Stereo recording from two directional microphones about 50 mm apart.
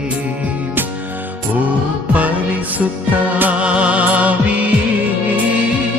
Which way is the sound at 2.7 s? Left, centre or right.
Right.